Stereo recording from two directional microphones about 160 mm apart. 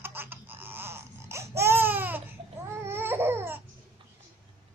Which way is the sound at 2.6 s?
15° right (ahead or behind).